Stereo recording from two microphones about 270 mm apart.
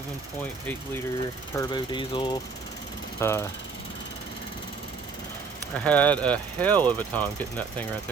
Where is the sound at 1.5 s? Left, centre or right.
Centre.